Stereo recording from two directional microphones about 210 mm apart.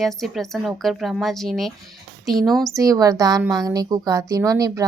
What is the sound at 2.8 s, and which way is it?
Speech, 15° right (ahead or behind).